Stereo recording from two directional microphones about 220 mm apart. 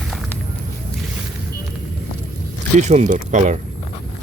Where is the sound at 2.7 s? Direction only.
30° right (ahead or behind).